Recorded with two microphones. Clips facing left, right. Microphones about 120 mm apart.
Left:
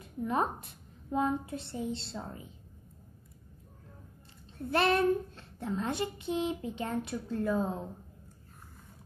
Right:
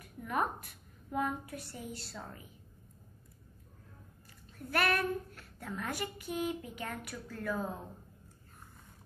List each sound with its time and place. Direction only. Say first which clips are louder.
0.0 s a woman's voice: left 3 dB; 25° left (ahead or behind)
4.6 s a child's voice: left 5 dB; 25° left (ahead or behind)